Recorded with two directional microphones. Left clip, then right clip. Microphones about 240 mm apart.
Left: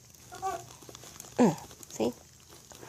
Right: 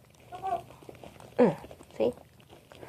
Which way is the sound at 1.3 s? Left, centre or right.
Left.